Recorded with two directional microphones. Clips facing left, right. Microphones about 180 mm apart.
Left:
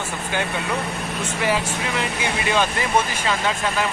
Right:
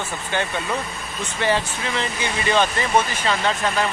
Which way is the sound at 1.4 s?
5° left (ahead or behind).